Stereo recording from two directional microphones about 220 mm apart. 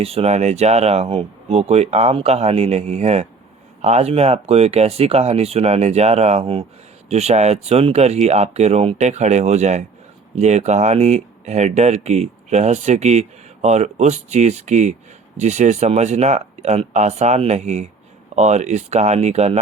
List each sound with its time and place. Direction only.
0.0 s speech: 25° right (ahead or behind)